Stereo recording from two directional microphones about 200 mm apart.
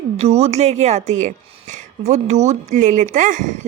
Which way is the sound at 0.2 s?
30° right (ahead or behind).